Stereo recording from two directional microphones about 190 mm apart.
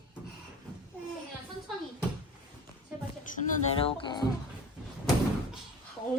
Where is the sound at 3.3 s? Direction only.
45° left (ahead or behind).